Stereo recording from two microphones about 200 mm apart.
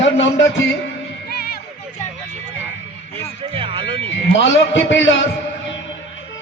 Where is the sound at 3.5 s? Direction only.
25° right (ahead or behind).